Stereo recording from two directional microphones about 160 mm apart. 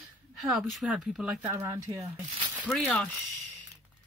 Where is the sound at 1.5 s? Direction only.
20° right (ahead or behind).